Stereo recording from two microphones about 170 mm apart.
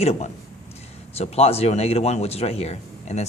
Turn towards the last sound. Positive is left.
turn(degrees=40)  # may be behind; listen again after turning